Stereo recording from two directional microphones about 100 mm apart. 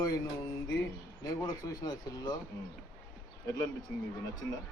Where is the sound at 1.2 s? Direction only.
35° left (ahead or behind).